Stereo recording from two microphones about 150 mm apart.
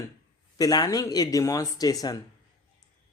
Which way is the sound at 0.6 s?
25° left (ahead or behind).